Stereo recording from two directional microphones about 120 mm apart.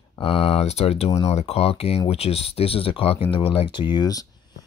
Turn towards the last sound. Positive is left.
turn(degrees=30)  # may be behind; listen again after turning